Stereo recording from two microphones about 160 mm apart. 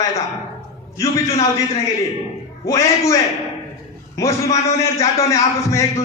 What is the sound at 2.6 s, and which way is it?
Speech, 20° left (ahead or behind).